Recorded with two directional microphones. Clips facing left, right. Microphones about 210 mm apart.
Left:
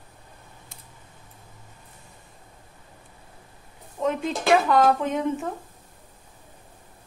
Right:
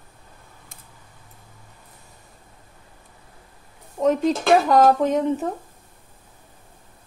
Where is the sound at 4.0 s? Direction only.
40° right (ahead or behind).